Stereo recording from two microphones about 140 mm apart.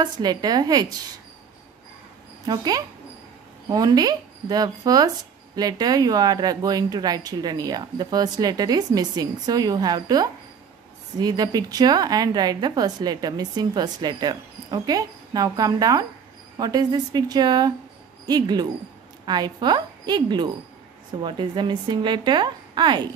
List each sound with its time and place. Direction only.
0.0 s a woman's voice: 30° right (ahead or behind)
2.4 s a woman's voice: 30° right (ahead or behind)